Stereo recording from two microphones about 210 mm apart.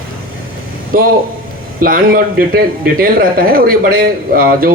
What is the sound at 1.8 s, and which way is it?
Speech, 45° right (ahead or behind).